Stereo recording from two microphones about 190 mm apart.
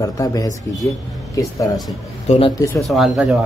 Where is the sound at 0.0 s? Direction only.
20° left (ahead or behind).